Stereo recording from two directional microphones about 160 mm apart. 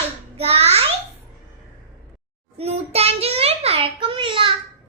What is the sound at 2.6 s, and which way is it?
Child singing, 40° right (ahead or behind).